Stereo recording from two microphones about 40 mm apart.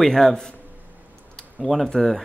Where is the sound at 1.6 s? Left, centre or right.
Centre.